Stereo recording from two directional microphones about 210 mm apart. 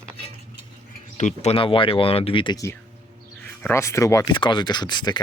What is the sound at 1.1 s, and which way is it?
Speech, 35° left (ahead or behind).